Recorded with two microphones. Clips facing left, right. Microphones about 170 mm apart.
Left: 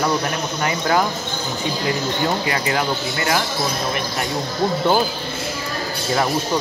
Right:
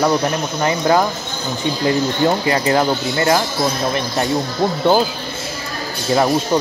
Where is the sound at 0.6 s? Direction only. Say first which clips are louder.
Right 4 dB; 25° right (ahead or behind).